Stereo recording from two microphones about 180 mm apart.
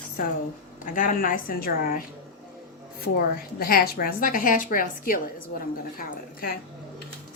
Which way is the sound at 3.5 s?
55° left (ahead or behind).